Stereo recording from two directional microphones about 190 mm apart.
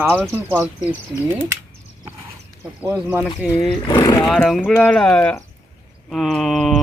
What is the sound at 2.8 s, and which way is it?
Speech, 10° right (ahead or behind).